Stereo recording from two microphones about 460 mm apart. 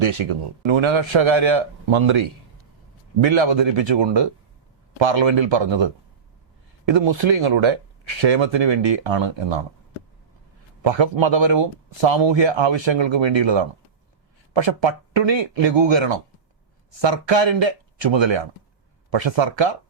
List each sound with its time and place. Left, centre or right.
0.0 s a man's voice: right
3.2 s speech: right
10.8 s speech: right